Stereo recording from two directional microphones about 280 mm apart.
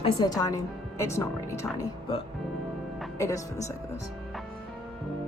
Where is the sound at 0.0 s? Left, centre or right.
Centre.